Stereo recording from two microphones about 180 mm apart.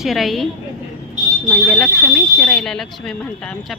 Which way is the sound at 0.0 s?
Centre (ahead or behind).